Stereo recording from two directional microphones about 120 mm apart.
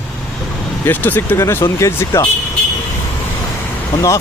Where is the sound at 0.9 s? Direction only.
15° left (ahead or behind).